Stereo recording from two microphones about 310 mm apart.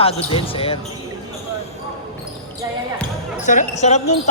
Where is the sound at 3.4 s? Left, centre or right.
Left.